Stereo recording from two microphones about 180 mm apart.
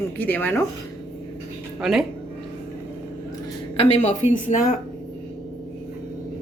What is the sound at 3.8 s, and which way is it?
Speech, 40° left (ahead or behind).